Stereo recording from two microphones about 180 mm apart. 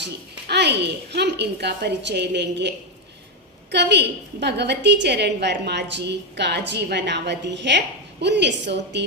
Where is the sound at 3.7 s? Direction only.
70° right (ahead or behind).